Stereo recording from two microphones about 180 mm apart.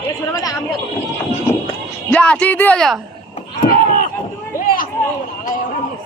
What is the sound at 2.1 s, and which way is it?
Speech, 5° left (ahead or behind).